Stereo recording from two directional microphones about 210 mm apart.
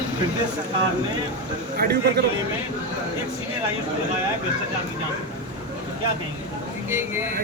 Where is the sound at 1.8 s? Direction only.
50° right (ahead or behind).